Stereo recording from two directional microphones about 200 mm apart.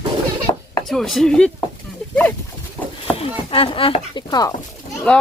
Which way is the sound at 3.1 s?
25° left (ahead or behind).